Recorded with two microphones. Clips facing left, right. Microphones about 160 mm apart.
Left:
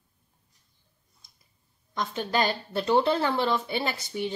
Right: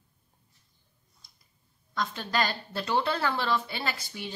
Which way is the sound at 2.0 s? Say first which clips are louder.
Left 3 dB; 20° left (ahead or behind).